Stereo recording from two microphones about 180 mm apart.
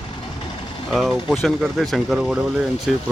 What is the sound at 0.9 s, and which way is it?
Speech, centre (ahead or behind).